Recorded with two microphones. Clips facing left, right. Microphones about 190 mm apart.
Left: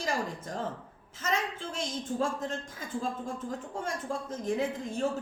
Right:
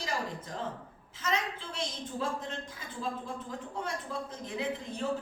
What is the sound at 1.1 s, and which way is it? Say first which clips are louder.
Speech: left 1 dB; 45° left (ahead or behind).